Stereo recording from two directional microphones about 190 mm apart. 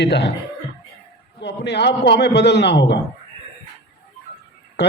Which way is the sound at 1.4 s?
65° left (ahead or behind).